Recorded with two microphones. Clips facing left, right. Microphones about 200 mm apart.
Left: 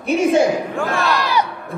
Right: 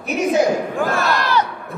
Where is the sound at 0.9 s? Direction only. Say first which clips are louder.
Even; centre (ahead or behind).